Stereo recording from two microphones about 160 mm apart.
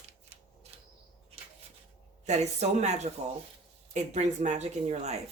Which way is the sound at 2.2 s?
45° right (ahead or behind).